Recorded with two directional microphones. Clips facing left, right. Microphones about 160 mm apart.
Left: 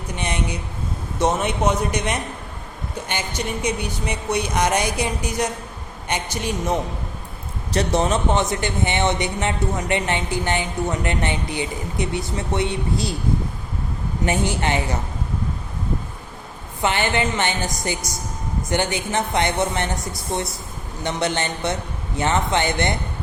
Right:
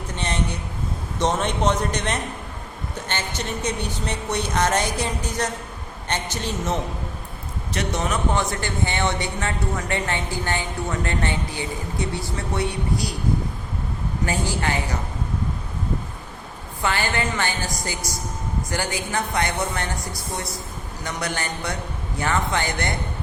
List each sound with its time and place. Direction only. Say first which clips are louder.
0.2 s a woman's voice: even; 15° left (ahead or behind)
7.7 s a man's voice: left 5 dB; 35° left (ahead or behind)
14.3 s a man's voice: left 4 dB; 20° left (ahead or behind)
16.8 s a man's voice: left 3 dB; 20° left (ahead or behind)